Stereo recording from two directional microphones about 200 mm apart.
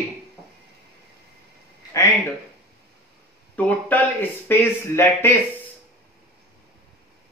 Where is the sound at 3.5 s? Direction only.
10° left (ahead or behind).